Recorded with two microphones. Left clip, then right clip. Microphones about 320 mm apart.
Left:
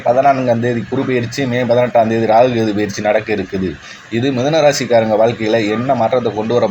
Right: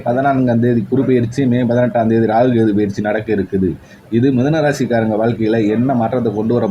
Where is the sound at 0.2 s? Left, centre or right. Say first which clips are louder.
Left 3 dB; right.